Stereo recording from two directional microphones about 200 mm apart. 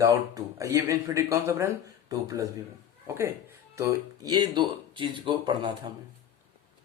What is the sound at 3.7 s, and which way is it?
Speech, 20° right (ahead or behind).